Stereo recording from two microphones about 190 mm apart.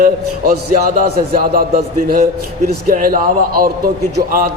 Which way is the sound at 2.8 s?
45° right (ahead or behind).